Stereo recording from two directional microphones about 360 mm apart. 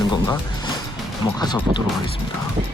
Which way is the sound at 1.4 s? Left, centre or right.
Centre.